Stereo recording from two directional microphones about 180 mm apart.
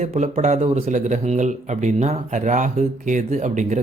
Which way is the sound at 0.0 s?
35° right (ahead or behind).